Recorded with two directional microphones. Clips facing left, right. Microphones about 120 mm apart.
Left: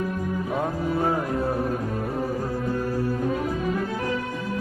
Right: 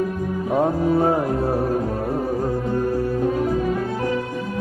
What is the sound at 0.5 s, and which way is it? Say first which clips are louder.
Music: right 9 dB; 30° right (ahead or behind).